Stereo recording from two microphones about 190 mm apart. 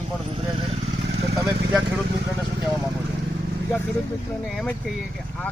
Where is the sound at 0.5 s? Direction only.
30° right (ahead or behind).